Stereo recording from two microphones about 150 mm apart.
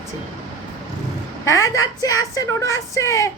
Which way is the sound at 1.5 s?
20° left (ahead or behind).